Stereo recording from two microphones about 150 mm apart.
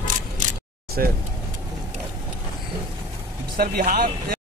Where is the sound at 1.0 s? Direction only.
70° right (ahead or behind).